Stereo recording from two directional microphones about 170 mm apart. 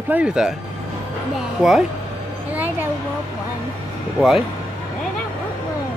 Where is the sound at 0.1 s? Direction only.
5° right (ahead or behind).